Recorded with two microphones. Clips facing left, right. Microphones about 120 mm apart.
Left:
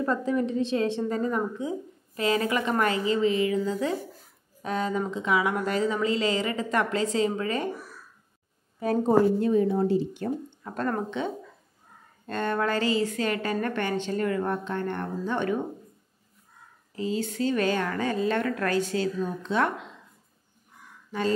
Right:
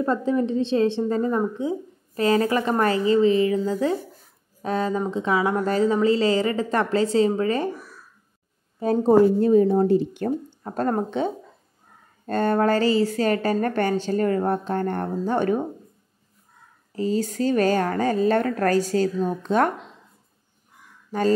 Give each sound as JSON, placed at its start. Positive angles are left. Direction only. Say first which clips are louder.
{"t": 0.0, "sound": "a woman's voice", "louder": "right 4 dB", "side_deg": -30}
{"t": 8.7, "sound": "a woman's voice", "louder": "right 5 dB", "side_deg": -30}
{"t": 10.6, "sound": "a woman's voice", "louder": "right 5 dB", "side_deg": -35}
{"t": 16.9, "sound": "a woman's voice", "louder": "right 5 dB", "side_deg": -40}
{"t": 21.1, "sound": "speech", "louder": "right 6 dB", "side_deg": -45}